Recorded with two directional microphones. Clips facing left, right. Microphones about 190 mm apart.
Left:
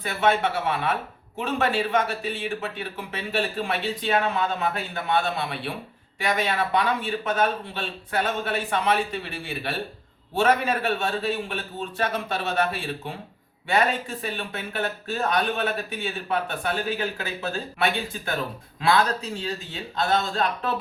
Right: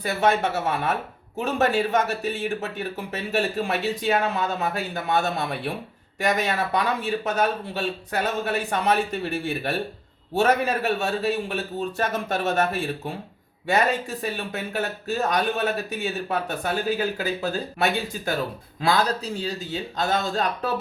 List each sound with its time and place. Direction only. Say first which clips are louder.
0.0 s speech: right 1 dB; 45° right (ahead or behind)
10.8 s speech: right 2 dB; 40° right (ahead or behind)